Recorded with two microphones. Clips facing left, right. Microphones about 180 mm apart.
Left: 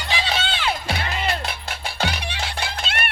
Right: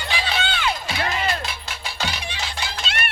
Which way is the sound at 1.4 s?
55° left (ahead or behind).